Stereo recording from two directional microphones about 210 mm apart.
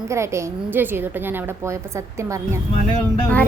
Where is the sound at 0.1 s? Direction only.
15° right (ahead or behind).